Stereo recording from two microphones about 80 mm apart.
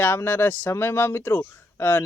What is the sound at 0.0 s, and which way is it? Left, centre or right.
Speech, left.